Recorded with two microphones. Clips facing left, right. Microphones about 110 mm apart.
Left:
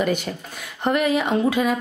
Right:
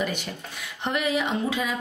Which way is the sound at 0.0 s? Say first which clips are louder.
Left 6 dB; 45° left (ahead or behind).